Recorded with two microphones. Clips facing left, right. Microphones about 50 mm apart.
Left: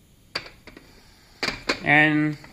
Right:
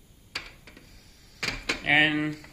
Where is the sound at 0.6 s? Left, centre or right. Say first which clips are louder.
Left 4 dB; left.